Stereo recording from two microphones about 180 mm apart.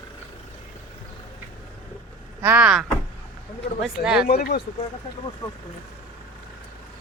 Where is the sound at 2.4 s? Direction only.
10° right (ahead or behind).